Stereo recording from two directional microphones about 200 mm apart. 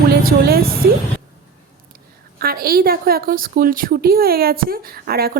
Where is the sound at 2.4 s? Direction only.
50° right (ahead or behind).